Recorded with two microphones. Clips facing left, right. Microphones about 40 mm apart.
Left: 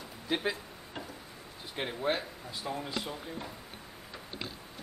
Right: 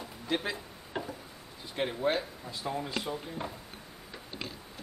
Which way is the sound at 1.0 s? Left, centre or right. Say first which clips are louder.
Right 6 dB; centre.